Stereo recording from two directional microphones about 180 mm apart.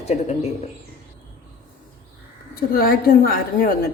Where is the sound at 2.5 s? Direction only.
55° left (ahead or behind).